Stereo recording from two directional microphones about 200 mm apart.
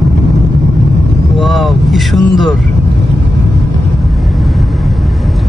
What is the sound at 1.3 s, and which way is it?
Speech, centre (ahead or behind).